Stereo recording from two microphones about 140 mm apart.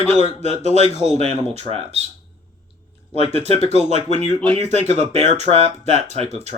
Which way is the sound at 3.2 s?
45° right (ahead or behind).